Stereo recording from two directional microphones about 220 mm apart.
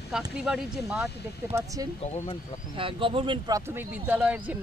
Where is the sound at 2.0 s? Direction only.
25° left (ahead or behind).